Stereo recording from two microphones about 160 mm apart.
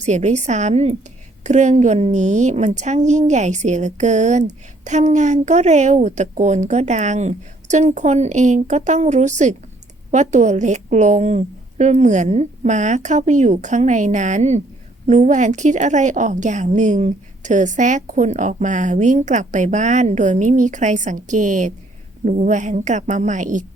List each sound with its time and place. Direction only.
0.0 s a woman's voice: 45° right (ahead or behind)